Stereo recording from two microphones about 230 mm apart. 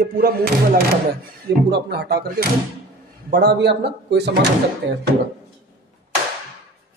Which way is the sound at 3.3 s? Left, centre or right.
Right.